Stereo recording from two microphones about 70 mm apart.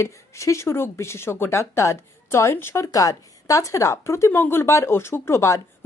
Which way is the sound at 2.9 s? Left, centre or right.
Left.